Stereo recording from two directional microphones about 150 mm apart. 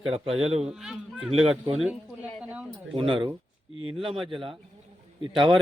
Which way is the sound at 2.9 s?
35° right (ahead or behind).